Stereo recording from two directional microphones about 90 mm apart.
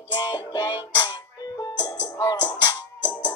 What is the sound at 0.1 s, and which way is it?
Music, 50° left (ahead or behind).